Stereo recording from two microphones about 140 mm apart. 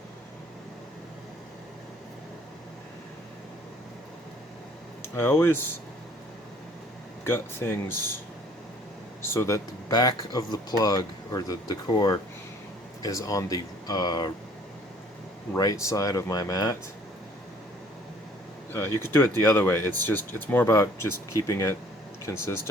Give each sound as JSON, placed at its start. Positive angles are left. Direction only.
{"t": 5.0, "sound": "speech", "side_deg": 15}
{"t": 7.3, "sound": "speech", "side_deg": 15}
{"t": 9.2, "sound": "speech", "side_deg": 20}
{"t": 9.9, "sound": "speech", "side_deg": 30}
{"t": 15.5, "sound": "speech", "side_deg": 25}
{"t": 18.9, "sound": "speech", "side_deg": 15}